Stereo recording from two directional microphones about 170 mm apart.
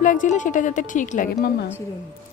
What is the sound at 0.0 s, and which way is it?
Speech, 50° left (ahead or behind).